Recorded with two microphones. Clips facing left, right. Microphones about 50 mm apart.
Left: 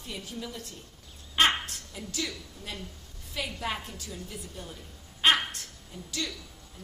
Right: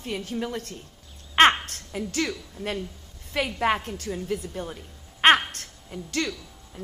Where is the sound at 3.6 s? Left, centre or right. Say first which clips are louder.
Right 10 dB; right.